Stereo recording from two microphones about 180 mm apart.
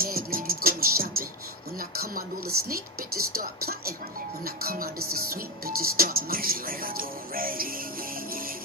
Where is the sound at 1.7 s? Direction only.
55° right (ahead or behind).